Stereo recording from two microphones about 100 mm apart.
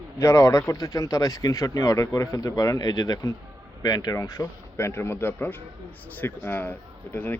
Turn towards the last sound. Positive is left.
turn(degrees=20)  # may be behind; listen again after turning